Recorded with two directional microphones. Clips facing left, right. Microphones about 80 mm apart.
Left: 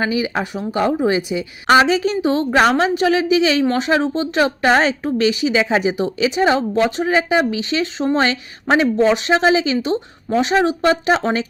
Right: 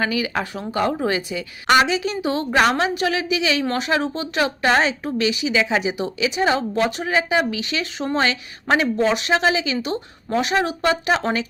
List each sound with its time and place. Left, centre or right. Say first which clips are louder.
0.0 s speech: left 3 dB; left
1.6 s a woman's voice: left 4 dB; left